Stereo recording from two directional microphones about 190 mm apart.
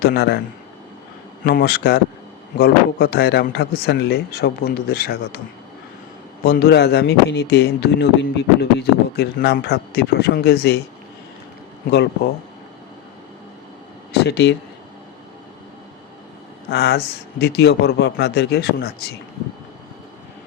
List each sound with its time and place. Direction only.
0.0 s speech: 55° left (ahead or behind)
1.5 s a man's voice: 50° left (ahead or behind)
6.4 s speech: 55° left (ahead or behind)
14.1 s speech: 60° left (ahead or behind)
16.6 s speech: 60° left (ahead or behind)